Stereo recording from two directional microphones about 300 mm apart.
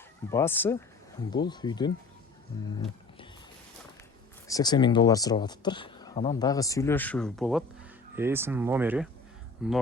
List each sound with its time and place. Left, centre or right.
0.3 s speech: centre
2.7 s a sound: centre
4.4 s speech: centre